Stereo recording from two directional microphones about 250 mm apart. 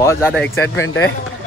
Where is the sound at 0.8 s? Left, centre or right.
Left.